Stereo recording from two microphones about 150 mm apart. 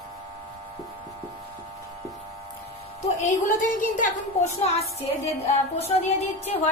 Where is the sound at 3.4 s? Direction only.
60° left (ahead or behind); by 6.7 s 45° left (ahead or behind).